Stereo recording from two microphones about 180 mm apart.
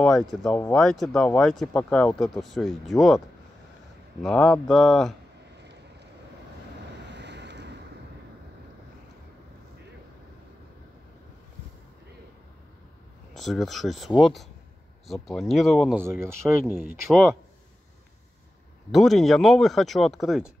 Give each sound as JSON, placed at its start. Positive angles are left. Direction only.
{"t": 0.0, "sound": "speech", "side_deg": 0}
{"t": 4.2, "sound": "speech", "side_deg": 5}
{"t": 7.1, "sound": "vehicle", "side_deg": -75}
{"t": 13.3, "sound": "speech", "side_deg": 0}
{"t": 16.0, "sound": "speech", "side_deg": -15}
{"t": 18.9, "sound": "speech", "side_deg": 0}